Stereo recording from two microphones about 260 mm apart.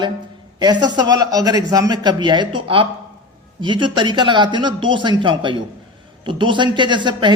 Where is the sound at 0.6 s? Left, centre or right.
Centre.